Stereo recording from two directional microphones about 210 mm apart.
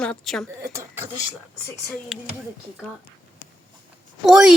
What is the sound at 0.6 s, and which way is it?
Speech, 15° right (ahead or behind).